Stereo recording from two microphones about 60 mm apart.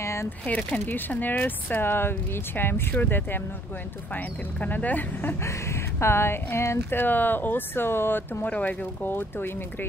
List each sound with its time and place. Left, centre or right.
0.0 s a sound: left
0.5 s speech: centre
0.7 s speech: left
5.4 s speech: left
8.5 s speech: left